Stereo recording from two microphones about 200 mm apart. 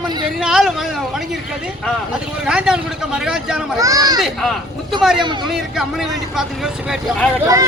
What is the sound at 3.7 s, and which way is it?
Speech, 15° right (ahead or behind).